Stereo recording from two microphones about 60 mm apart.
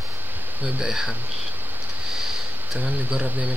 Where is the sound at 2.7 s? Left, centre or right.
Centre.